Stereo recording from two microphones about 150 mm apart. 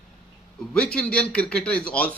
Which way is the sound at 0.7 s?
5° left (ahead or behind).